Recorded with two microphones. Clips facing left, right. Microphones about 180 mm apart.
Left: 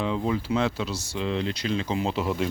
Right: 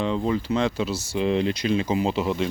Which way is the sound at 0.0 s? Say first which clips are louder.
Right 2 dB; 5° left (ahead or behind).